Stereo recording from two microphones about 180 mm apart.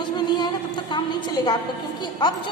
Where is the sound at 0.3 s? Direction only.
25° left (ahead or behind).